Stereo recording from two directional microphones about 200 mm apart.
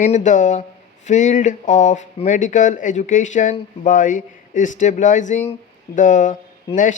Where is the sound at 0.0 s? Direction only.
35° left (ahead or behind).